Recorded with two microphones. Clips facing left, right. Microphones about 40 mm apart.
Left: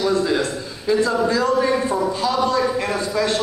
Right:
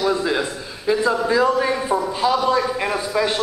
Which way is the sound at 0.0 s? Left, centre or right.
Centre.